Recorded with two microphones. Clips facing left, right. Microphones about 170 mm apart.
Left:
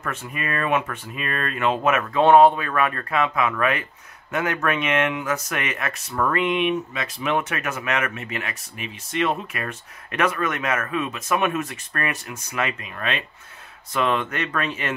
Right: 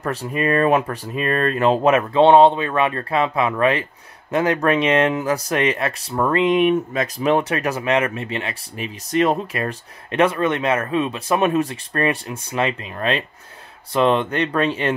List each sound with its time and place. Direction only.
0.0 s speech: 35° right (ahead or behind)